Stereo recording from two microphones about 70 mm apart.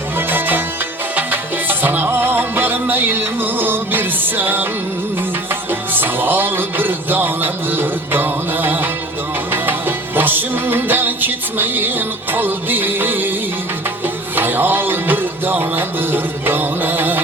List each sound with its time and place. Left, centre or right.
0.2 s music: right
5.9 s music: right
14.3 s music: right